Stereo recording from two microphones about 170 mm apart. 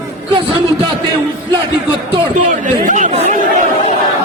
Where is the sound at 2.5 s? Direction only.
50° right (ahead or behind).